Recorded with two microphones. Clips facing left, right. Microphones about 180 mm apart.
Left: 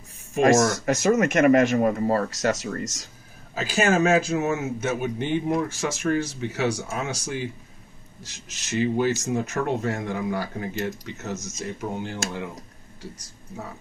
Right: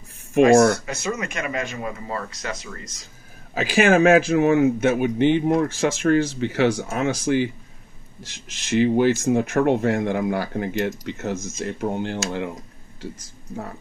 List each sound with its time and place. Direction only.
1.0 s speech: 45° left (ahead or behind)
3.5 s a man's voice: 65° right (ahead or behind)
8.6 s a man's voice: 65° right (ahead or behind)